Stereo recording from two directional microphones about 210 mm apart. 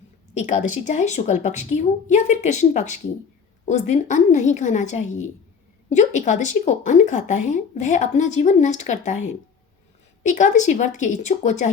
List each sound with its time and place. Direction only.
0.3 s speech: 35° left (ahead or behind)